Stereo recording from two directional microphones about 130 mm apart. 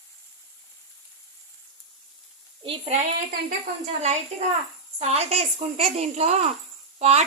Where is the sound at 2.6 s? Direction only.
50° right (ahead or behind).